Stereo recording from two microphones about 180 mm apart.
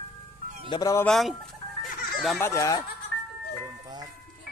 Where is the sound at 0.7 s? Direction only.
20° left (ahead or behind).